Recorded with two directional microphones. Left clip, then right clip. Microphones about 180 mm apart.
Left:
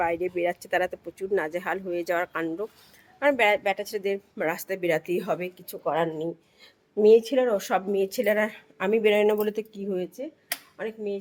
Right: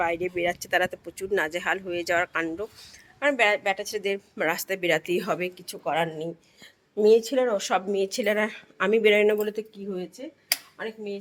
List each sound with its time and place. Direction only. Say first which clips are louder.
0.0 s speech: even; 10° left (ahead or behind)
9.5 s speech: left 2 dB; 35° left (ahead or behind)